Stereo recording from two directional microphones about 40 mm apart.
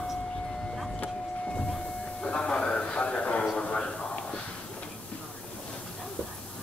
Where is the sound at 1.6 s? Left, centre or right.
Centre.